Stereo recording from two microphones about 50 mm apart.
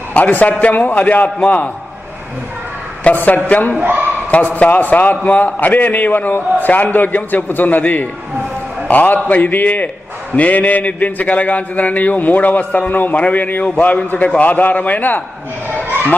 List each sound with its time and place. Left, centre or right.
0.1 s a man's voice: left
3.0 s a man's voice: left
15.7 s children playing: right